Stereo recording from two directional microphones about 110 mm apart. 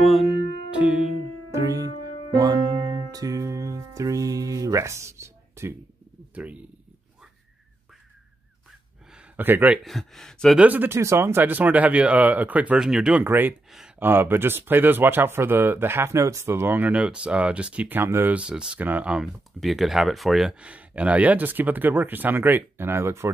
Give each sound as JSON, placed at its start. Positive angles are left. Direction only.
{"t": 0.0, "sound": "music", "side_deg": 0}
{"t": 1.5, "sound": "music", "side_deg": -35}
{"t": 6.3, "sound": "speech", "side_deg": -15}
{"t": 9.1, "sound": "a sound", "side_deg": -15}
{"t": 9.8, "sound": "speech", "side_deg": 5}
{"t": 10.6, "sound": "speech", "side_deg": -15}
{"t": 13.2, "sound": "speech", "side_deg": -15}
{"t": 13.7, "sound": "speech", "side_deg": -5}
{"t": 13.9, "sound": "speech", "side_deg": -20}